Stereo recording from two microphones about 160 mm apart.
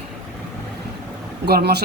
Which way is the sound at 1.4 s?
90° right.